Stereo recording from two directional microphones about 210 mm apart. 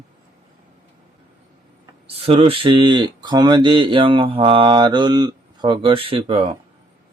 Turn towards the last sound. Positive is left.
turn(degrees=-25)  # may be behind; listen again after turning